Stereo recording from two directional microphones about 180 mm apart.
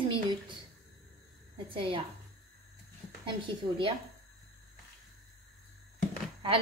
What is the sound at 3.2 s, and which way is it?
Speech, 25° right (ahead or behind).